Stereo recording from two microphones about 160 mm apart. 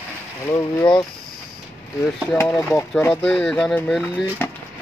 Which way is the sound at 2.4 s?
10° left (ahead or behind).